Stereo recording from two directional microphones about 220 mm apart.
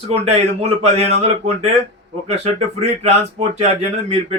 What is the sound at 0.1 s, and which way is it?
Speech, 30° right (ahead or behind).